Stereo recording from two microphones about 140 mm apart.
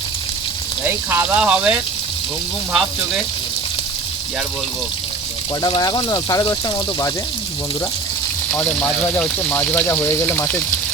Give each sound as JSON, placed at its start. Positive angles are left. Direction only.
{"t": 0.9, "sound": "speech", "side_deg": -15}
{"t": 5.6, "sound": "speech", "side_deg": 30}
{"t": 8.4, "sound": "speech", "side_deg": 15}